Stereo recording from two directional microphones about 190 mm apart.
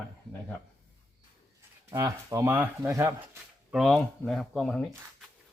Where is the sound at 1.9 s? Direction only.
15° right (ahead or behind).